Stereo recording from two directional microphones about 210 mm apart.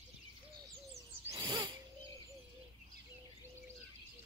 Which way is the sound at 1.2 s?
20° right (ahead or behind).